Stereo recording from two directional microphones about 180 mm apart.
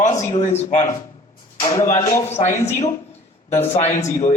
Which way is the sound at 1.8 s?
40° left (ahead or behind).